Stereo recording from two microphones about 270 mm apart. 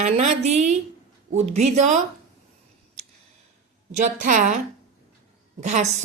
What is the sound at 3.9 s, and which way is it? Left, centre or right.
Speech, right.